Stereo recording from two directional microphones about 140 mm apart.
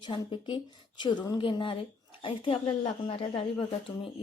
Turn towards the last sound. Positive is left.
turn(degrees=40)  # may be behind; listen again after turning